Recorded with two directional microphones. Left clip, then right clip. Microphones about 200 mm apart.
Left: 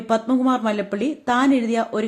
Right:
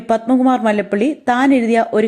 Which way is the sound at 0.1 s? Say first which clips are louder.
Right 5 dB; 20° right (ahead or behind).